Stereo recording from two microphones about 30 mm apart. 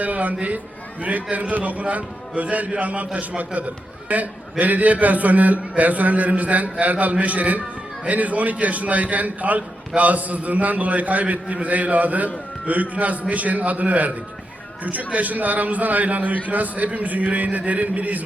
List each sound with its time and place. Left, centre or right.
0.0 s a man's voice: right